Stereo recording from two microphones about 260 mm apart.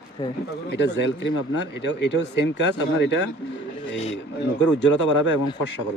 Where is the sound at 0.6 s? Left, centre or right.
Left.